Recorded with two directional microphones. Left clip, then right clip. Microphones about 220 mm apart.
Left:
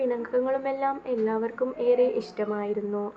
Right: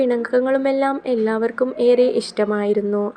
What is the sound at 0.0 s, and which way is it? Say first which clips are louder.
Speech: right 8 dB; 35° right (ahead or behind).